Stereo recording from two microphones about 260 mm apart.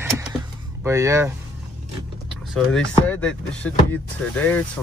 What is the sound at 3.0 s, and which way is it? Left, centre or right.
Speech, centre.